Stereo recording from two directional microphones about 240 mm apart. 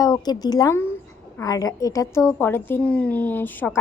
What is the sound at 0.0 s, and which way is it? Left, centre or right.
A woman's voice, centre.